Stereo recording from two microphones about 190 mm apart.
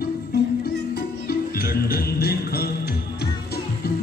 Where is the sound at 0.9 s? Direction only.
55° left (ahead or behind).